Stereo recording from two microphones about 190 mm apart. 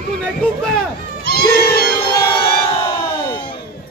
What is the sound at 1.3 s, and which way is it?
Cat, 55° left (ahead or behind).